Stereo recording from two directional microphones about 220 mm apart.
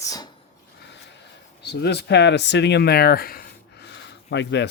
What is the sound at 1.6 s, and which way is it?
Speech, 50° left (ahead or behind).